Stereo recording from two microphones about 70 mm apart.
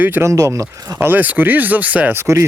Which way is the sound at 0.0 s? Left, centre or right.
Right.